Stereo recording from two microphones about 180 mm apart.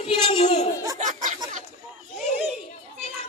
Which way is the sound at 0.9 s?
45° right (ahead or behind).